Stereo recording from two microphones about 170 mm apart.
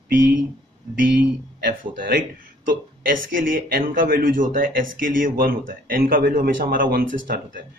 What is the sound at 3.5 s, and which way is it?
Speech, 55° right (ahead or behind).